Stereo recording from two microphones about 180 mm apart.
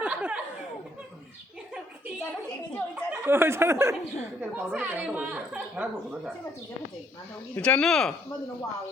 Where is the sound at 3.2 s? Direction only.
10° right (ahead or behind).